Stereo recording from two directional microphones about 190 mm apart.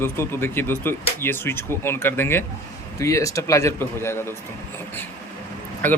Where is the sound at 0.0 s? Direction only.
15° left (ahead or behind).